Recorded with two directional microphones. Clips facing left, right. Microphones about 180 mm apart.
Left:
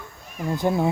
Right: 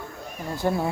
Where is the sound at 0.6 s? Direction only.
20° left (ahead or behind).